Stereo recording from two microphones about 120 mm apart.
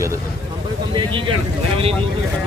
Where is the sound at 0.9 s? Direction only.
45° right (ahead or behind).